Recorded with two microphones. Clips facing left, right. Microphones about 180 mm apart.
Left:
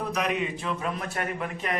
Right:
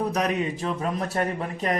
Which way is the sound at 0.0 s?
40° right (ahead or behind).